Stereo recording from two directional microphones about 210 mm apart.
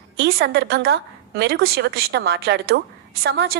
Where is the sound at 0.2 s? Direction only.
50° right (ahead or behind).